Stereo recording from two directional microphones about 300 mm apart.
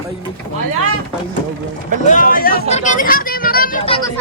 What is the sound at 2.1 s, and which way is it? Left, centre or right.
Speech, left.